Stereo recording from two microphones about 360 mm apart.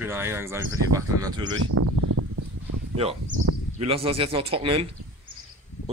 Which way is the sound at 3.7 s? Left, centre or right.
Centre.